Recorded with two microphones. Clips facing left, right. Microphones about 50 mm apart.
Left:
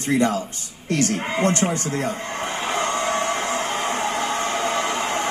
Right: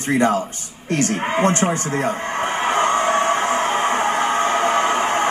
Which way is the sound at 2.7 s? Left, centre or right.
Right.